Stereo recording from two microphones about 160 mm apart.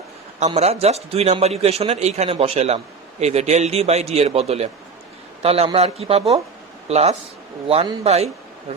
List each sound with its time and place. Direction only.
0.3 s a man's voice: 40° right (ahead or behind)